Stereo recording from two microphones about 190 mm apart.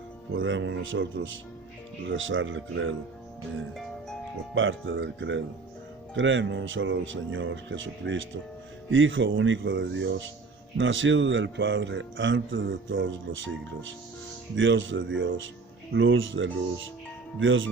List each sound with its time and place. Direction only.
0.3 s speech: 85° right
4.5 s speech: 90° right